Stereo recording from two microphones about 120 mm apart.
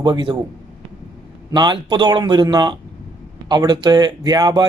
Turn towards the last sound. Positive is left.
turn(degrees=-35)  # may be behind; listen again after turning